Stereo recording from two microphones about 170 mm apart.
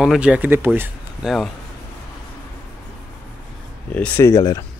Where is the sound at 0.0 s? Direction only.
5° right (ahead or behind).